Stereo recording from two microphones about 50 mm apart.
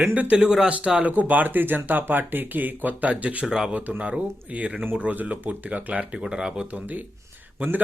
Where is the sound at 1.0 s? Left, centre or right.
Right.